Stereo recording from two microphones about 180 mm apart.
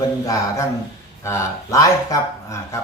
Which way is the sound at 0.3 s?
15° left (ahead or behind).